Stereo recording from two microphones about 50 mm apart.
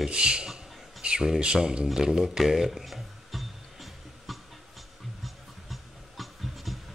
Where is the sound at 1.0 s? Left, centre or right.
Centre.